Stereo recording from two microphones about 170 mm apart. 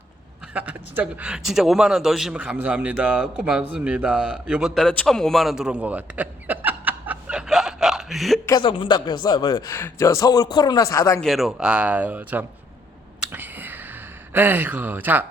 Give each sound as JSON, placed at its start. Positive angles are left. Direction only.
{"t": 0.5, "sound": "speech", "side_deg": -10}
{"t": 8.4, "sound": "a man's voice", "side_deg": 25}
{"t": 11.2, "sound": "speech", "side_deg": 0}
{"t": 13.2, "sound": "a sound", "side_deg": -10}